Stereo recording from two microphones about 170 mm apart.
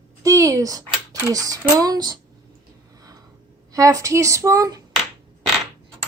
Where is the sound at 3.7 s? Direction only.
20° right (ahead or behind).